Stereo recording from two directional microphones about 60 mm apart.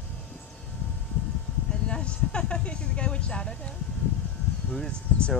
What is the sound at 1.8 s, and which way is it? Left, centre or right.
Speech, centre.